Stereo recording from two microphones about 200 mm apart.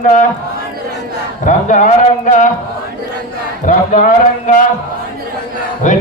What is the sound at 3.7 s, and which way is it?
Speech, 40° left (ahead or behind).